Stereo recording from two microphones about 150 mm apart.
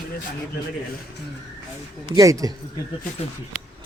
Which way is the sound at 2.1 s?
20° right (ahead or behind).